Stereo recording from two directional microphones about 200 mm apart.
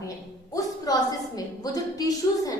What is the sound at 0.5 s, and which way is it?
A woman's voice, 20° left (ahead or behind).